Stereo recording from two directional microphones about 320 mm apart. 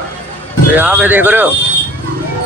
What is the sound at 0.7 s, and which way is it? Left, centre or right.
Speech, centre.